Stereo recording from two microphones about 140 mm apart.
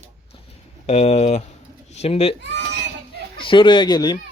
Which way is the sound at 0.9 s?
50° left (ahead or behind).